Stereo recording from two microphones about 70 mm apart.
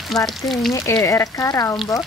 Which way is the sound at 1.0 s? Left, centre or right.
Left.